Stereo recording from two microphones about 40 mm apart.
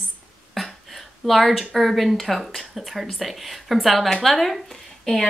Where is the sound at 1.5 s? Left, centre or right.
Centre.